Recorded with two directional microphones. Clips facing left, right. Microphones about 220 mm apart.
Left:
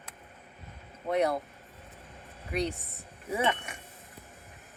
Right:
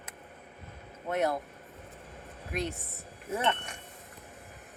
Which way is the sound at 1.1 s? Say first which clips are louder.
Left 2 dB; centre (ahead or behind).